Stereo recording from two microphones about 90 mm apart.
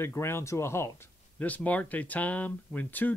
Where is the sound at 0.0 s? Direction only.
30° left (ahead or behind).